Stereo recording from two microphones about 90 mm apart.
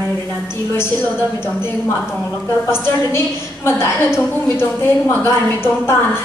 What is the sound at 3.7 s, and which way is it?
A woman's voice, 30° left (ahead or behind).